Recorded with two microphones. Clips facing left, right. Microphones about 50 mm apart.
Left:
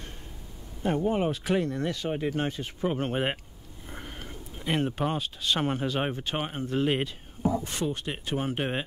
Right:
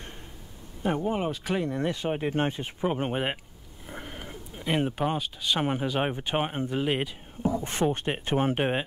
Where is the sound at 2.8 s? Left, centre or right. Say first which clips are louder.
Right 1 dB; centre.